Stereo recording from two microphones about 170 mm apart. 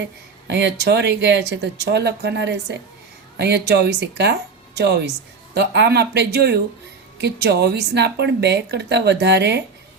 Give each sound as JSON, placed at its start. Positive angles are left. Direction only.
{"t": 0.0, "sound": "a woman's voice", "side_deg": -85}